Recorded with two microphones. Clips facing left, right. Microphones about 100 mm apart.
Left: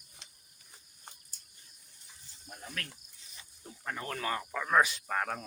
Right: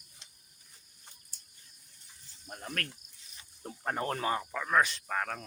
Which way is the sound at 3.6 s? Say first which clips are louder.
Right 6 dB; 45° right (ahead or behind).